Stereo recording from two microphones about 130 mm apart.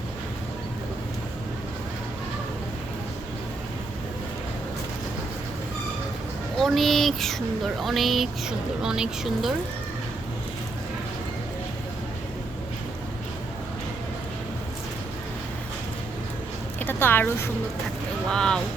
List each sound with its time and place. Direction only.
6.6 s speech: centre (ahead or behind)
16.8 s a sound: 15° left (ahead or behind)
18.3 s speech: 5° left (ahead or behind)